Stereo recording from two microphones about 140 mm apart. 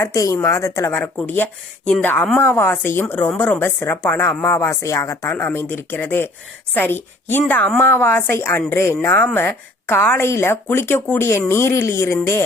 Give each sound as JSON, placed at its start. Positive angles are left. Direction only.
{"t": 0.0, "sound": "a woman's voice", "side_deg": 20}